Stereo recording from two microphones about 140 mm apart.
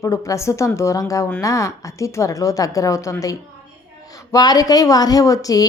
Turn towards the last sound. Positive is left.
turn(degrees=25)  # may be behind; listen again after turning